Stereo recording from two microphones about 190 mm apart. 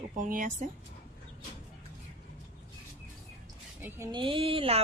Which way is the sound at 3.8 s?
10° right (ahead or behind).